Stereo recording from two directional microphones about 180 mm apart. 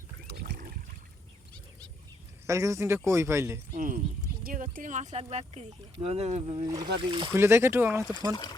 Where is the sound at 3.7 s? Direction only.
45° right (ahead or behind); by 7.3 s 25° right (ahead or behind).